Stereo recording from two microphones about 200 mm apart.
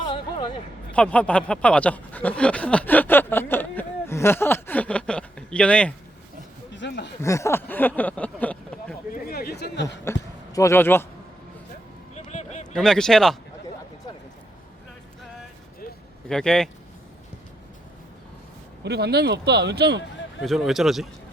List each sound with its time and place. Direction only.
0.1 s a sound: 25° left (ahead or behind)
0.9 s speech: 5° left (ahead or behind)
6.7 s speech: 60° left (ahead or behind)
7.2 s speech: 15° left (ahead or behind)
9.2 s speech: 50° left (ahead or behind)
10.0 s speech: 15° left (ahead or behind)
12.1 s a sound: 35° left (ahead or behind)
12.7 s speech: centre (ahead or behind)
16.3 s speech: 5° left (ahead or behind)
18.8 s speech: 55° right (ahead or behind)
20.4 s speech: centre (ahead or behind)